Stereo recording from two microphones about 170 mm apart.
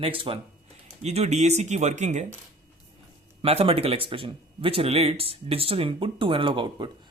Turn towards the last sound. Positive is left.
turn(degrees=-30)  # may be behind; listen again after turning